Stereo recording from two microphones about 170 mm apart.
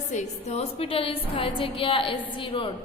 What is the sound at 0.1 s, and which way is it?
A woman's voice, 40° left (ahead or behind).